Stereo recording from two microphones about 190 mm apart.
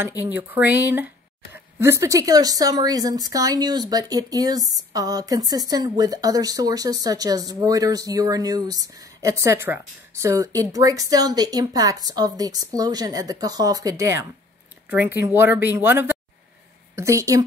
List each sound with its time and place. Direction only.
0.2 s speech: 10° right (ahead or behind)